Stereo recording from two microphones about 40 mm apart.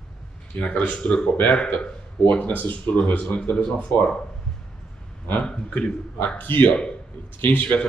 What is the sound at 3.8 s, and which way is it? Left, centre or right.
Speech, left.